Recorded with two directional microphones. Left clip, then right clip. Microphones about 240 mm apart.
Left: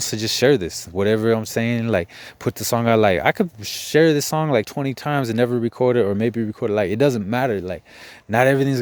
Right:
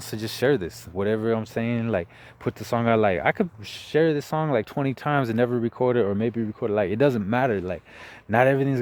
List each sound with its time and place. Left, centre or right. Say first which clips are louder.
0.0 s speech: left 6 dB; left